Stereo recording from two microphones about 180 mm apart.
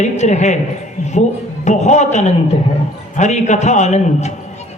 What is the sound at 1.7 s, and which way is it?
A man's voice, 40° left (ahead or behind).